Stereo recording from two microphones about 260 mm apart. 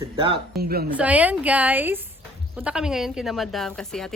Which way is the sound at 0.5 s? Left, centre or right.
Right.